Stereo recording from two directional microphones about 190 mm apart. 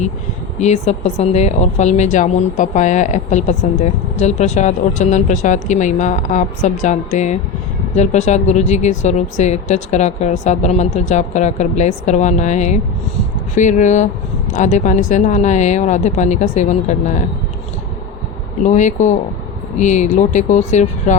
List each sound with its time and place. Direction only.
0.6 s speech: 35° left (ahead or behind)
18.6 s speech: 40° left (ahead or behind)